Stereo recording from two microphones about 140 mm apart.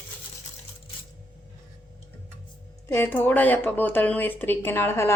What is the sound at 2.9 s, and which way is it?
A woman's voice, 15° left (ahead or behind).